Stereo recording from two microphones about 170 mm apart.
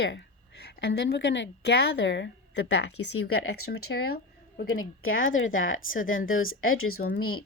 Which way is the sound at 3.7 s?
70° left (ahead or behind).